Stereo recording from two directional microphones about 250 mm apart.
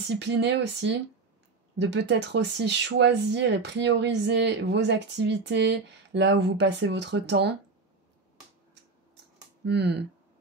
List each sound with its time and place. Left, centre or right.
0.1 s speech: right
9.7 s speech: right